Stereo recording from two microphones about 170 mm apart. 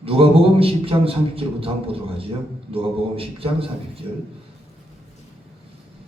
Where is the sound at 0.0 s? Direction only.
35° right (ahead or behind).